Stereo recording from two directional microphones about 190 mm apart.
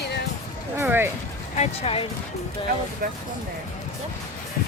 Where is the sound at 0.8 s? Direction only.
10° right (ahead or behind).